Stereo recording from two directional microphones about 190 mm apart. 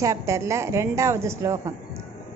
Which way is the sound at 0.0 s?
15° right (ahead or behind).